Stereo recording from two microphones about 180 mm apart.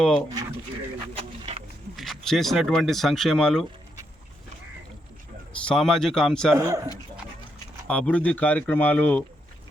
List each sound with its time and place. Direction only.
0.0 s speech: 5° left (ahead or behind)
1.1 s a sound: 35° right (ahead or behind)
2.0 s speech: centre (ahead or behind)
5.6 s speech: centre (ahead or behind)
6.5 s speech: 15° right (ahead or behind)
7.9 s speech: 5° left (ahead or behind)